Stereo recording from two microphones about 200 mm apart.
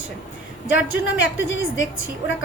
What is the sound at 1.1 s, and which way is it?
A woman's voice, 70° left (ahead or behind).